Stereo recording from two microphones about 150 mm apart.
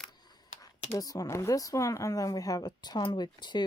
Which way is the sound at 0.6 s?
25° left (ahead or behind).